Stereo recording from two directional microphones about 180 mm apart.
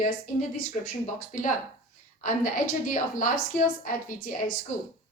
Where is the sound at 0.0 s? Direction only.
45° left (ahead or behind).